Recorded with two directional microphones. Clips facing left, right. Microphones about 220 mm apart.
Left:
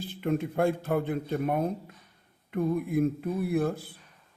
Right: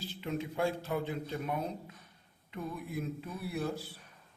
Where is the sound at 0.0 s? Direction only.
55° left (ahead or behind).